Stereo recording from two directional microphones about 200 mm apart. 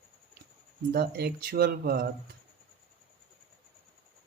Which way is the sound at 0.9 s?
50° right (ahead or behind).